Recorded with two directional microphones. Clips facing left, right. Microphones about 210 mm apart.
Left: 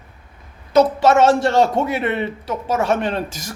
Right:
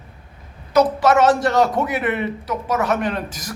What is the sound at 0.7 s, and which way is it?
A man's voice, 25° left (ahead or behind).